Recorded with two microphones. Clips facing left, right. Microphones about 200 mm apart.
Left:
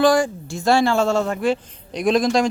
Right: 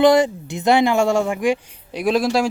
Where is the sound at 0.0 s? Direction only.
20° right (ahead or behind).